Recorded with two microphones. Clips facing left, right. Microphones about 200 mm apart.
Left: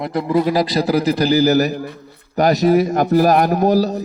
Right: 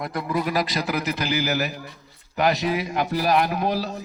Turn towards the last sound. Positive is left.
turn(degrees=40)  # may be behind; listen again after turning